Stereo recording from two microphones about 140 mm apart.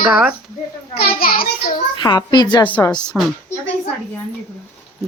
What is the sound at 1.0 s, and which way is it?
Speech, 90° left.